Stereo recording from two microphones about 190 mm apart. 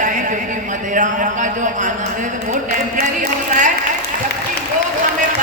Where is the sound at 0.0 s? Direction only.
40° right (ahead or behind).